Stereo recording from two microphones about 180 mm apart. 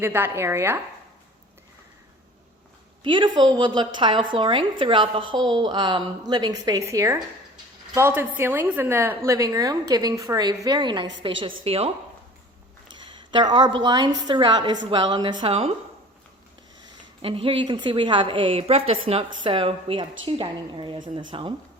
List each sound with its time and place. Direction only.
0.0 s a woman's voice: 10° right (ahead or behind)
3.0 s a woman's voice: 25° right (ahead or behind)
13.0 s a woman's voice: 25° right (ahead or behind)
17.2 s a woman's voice: 30° right (ahead or behind)